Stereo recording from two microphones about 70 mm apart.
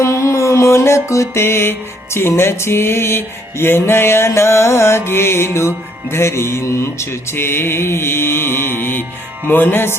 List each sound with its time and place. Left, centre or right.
0.0 s music: left